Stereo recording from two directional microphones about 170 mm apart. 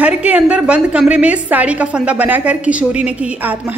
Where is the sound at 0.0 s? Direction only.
10° right (ahead or behind).